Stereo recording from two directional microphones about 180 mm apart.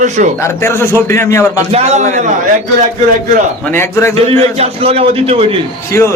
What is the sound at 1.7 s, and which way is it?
Speech, 40° right (ahead or behind).